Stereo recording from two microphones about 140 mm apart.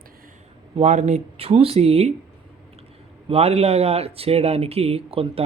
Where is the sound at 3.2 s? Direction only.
45° right (ahead or behind).